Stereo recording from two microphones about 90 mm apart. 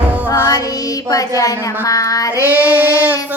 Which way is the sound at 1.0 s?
40° left (ahead or behind).